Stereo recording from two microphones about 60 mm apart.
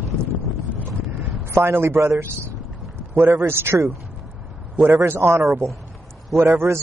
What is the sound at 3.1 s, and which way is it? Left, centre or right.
Speech, right.